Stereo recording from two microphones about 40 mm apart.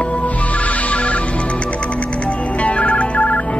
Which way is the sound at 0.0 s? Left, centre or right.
Left.